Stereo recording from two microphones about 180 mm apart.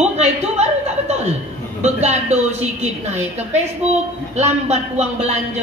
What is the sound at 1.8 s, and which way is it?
A woman's voice, 40° right (ahead or behind).